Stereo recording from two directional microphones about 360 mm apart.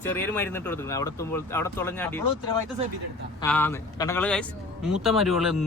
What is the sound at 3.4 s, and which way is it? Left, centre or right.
A man's voice, centre.